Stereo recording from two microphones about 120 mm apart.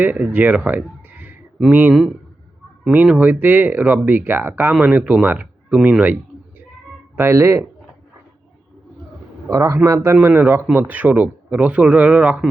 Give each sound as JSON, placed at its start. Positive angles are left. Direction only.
{"t": 0.0, "sound": "speech", "side_deg": -15}
{"t": 7.2, "sound": "a man's voice", "side_deg": -20}
{"t": 9.5, "sound": "a man's voice", "side_deg": -25}